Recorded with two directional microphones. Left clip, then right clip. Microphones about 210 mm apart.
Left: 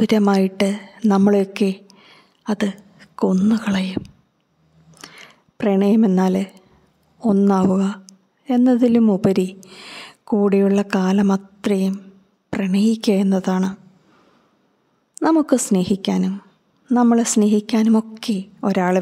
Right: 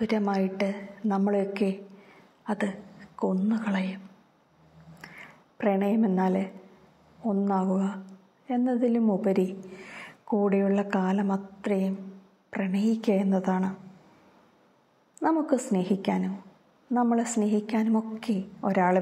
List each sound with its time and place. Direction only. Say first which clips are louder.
0.0 s a woman's voice: left 10 dB; 45° left (ahead or behind)
5.0 s a woman's voice: left 5 dB; 40° left (ahead or behind)
15.3 s a woman's voice: left 9 dB; 45° left (ahead or behind)